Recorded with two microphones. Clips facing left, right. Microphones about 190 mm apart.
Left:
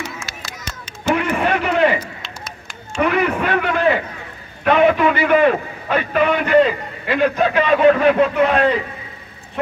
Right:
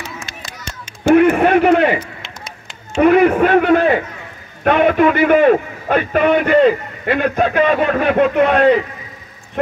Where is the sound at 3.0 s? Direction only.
50° right (ahead or behind).